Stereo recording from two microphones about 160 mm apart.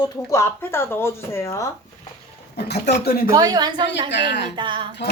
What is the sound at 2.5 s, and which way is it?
Speech, 90° left.